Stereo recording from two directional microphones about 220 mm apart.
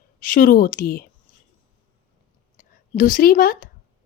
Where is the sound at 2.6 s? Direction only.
35° left (ahead or behind).